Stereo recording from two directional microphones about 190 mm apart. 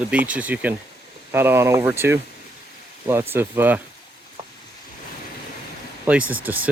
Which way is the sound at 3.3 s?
10° right (ahead or behind).